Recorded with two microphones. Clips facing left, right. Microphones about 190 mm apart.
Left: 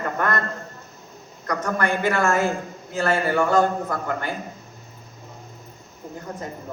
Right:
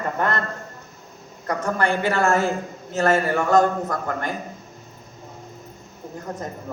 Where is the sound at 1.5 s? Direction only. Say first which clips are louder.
Right 1 dB; 30° right (ahead or behind).